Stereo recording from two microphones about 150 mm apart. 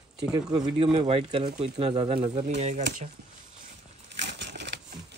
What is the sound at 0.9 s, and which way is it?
Speech, 40° right (ahead or behind).